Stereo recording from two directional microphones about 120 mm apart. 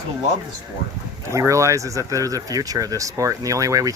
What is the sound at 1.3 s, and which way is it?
Speech, 25° right (ahead or behind).